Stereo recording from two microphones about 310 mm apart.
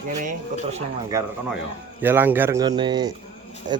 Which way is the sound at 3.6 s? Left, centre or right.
Right.